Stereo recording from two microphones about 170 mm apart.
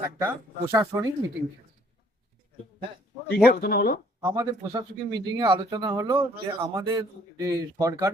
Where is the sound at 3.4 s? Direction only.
65° left (ahead or behind).